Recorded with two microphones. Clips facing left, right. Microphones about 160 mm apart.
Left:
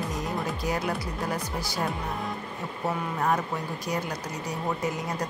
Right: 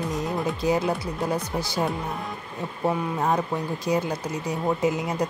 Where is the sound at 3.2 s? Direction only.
20° right (ahead or behind).